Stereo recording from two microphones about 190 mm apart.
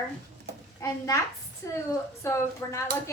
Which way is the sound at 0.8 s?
15° left (ahead or behind).